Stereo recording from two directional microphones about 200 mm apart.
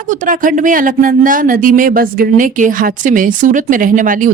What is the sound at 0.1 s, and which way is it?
Speech, 40° right (ahead or behind).